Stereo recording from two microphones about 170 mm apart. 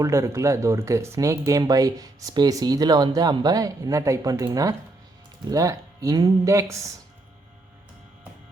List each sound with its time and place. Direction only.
0.0 s speech: 20° right (ahead or behind)